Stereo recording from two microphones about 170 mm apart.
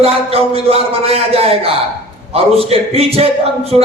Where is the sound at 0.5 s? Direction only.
35° right (ahead or behind).